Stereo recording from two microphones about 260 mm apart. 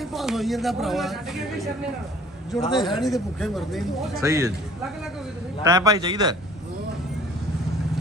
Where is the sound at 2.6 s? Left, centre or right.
Centre.